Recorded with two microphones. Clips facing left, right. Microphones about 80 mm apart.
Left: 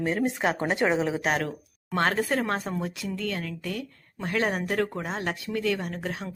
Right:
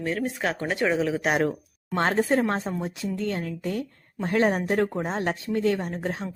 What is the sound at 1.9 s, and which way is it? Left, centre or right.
A woman's voice, right.